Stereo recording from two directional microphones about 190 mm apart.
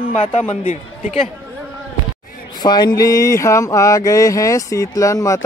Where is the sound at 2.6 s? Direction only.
20° left (ahead or behind).